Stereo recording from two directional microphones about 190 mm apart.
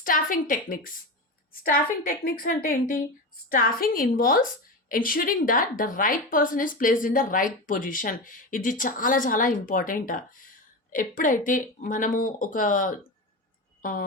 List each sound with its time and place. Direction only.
0.0 s a woman's voice: 45° left (ahead or behind)